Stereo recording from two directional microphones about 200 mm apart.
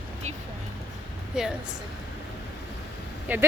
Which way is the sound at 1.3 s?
5° right (ahead or behind).